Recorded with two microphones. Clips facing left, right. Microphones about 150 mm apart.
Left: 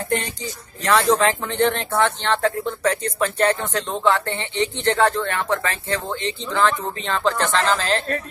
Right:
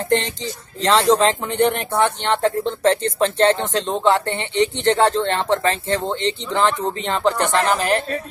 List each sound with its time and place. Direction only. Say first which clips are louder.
0.8 s speech: right 2 dB; 20° right (ahead or behind)